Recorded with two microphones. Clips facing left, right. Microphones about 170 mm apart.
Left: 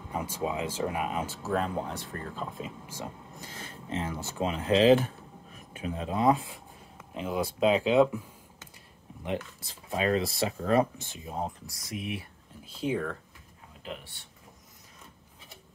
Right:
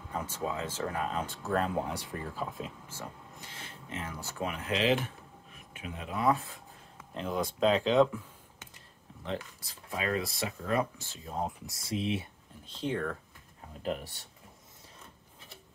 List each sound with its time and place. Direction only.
0.1 s speech: 10° left (ahead or behind)
3.3 s a sound: 40° left (ahead or behind)
4.0 s speech: 25° left (ahead or behind)
6.3 s speech: 15° left (ahead or behind)
9.2 s speech: 20° left (ahead or behind)
11.1 s speech: 15° left (ahead or behind)
11.6 s speech: 25° right (ahead or behind)
12.6 s speech: 10° left (ahead or behind)
13.8 s speech: 40° right (ahead or behind)